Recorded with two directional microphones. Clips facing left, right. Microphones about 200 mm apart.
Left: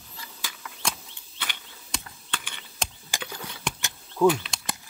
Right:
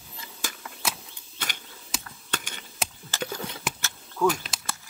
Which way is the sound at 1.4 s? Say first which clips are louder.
Right 1 dB; 45° right (ahead or behind).